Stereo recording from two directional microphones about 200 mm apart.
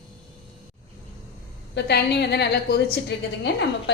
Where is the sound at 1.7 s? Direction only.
55° left (ahead or behind).